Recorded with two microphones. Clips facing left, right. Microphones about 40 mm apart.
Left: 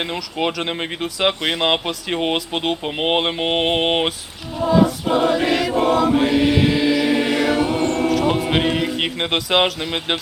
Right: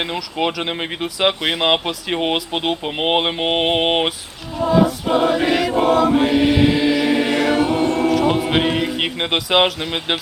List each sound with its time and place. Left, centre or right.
0.0 s speech: centre
4.5 s choir: centre